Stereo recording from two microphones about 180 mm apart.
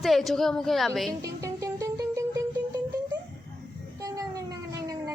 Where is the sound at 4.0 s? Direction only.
20° right (ahead or behind).